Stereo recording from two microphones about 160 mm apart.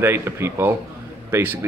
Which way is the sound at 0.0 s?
15° right (ahead or behind).